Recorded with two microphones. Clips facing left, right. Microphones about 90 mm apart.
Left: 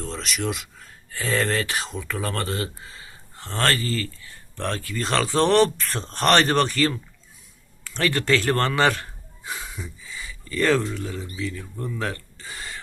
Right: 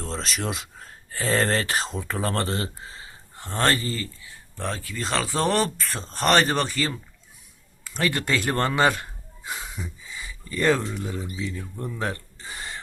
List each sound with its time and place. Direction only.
0.0 s speech: 35° right (ahead or behind)
3.4 s speech: 15° right (ahead or behind)
4.5 s a man's voice: 5° right (ahead or behind)
9.5 s a sound: 25° right (ahead or behind)
11.4 s speech: 20° right (ahead or behind)